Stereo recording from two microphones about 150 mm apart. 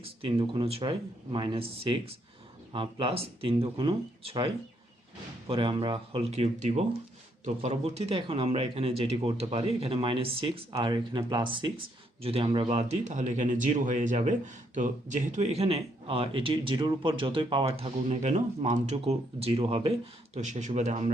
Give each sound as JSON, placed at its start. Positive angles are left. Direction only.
{"t": 0.0, "sound": "speech", "side_deg": -35}
{"t": 5.5, "sound": "speech", "side_deg": -35}
{"t": 12.6, "sound": "speech", "side_deg": -50}
{"t": 20.3, "sound": "speech", "side_deg": -55}